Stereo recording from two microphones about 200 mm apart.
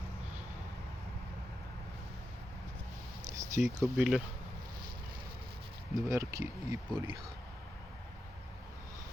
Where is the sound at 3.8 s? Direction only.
5° right (ahead or behind).